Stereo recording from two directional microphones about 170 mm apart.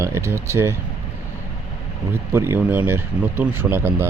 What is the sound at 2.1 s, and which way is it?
Speech, 15° right (ahead or behind).